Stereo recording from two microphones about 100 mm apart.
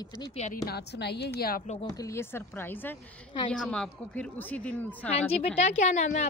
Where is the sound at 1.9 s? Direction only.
30° left (ahead or behind).